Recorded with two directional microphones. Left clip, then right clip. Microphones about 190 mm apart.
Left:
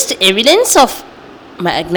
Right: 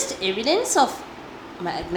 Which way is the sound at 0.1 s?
45° left (ahead or behind).